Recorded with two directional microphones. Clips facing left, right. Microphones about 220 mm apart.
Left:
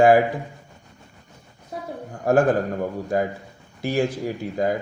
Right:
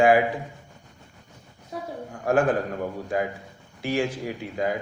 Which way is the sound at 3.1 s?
40° left (ahead or behind).